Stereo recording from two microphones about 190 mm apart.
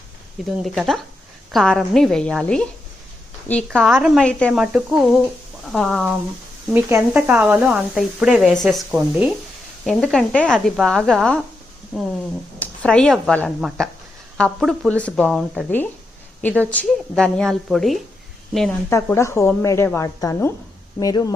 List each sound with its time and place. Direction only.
0.6 s speech: centre (ahead or behind)
6.7 s speech: 10° right (ahead or behind)
9.8 s speech: centre (ahead or behind)
12.5 s speech: 5° left (ahead or behind)
18.9 s speech: 15° left (ahead or behind)